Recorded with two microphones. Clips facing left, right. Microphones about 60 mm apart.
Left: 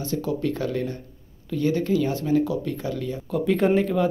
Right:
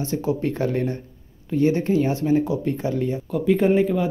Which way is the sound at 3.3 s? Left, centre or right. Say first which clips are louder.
Right 1 dB; centre.